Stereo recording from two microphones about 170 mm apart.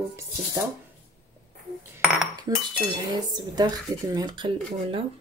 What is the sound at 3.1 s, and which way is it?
Speech, 25° right (ahead or behind).